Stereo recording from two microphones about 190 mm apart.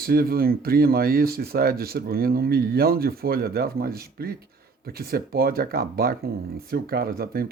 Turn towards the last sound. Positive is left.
turn(degrees=-55)  # may be behind; listen again after turning